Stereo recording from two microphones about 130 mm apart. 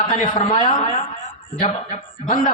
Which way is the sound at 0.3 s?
75° left (ahead or behind).